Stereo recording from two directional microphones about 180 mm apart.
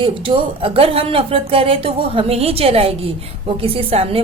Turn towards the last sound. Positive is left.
turn(degrees=-30)  # may be behind; listen again after turning